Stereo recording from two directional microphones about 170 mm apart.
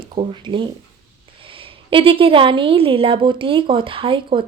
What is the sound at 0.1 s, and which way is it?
A woman's voice, 30° right (ahead or behind).